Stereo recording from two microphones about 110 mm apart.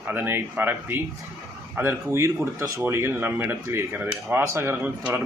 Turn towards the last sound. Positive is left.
turn(degrees=-15)  # may be behind; listen again after turning